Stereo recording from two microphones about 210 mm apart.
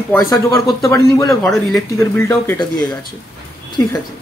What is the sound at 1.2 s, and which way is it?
Speech, centre (ahead or behind).